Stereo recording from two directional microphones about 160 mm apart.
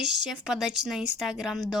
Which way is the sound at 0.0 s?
5° right (ahead or behind).